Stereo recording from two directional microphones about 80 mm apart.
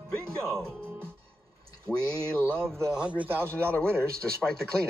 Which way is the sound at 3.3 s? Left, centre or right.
Right.